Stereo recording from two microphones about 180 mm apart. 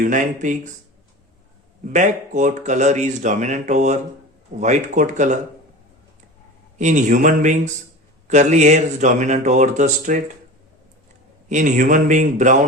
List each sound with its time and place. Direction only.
0.0 s a man's voice: 45° right (ahead or behind)
1.8 s speech: 45° right (ahead or behind)
6.7 s a man's voice: 40° right (ahead or behind)
11.4 s a man's voice: 45° right (ahead or behind)